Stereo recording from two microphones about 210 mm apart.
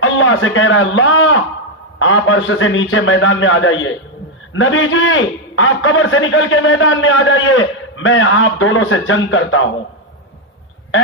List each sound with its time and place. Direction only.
0.0 s a man's voice: 70° left (ahead or behind)